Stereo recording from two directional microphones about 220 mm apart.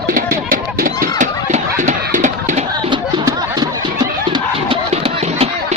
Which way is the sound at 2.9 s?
20° right (ahead or behind).